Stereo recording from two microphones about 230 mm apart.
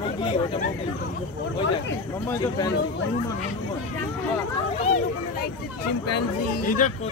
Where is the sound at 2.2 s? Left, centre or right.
Centre.